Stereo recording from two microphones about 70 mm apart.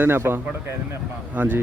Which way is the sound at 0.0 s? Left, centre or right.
Right.